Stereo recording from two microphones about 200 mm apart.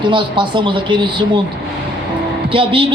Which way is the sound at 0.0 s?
25° right (ahead or behind).